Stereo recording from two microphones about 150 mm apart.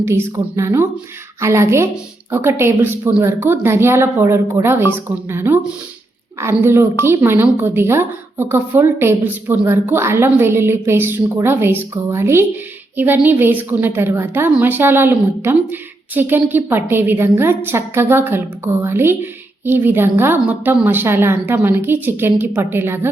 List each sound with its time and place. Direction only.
0.0 s a woman's voice: 15° right (ahead or behind)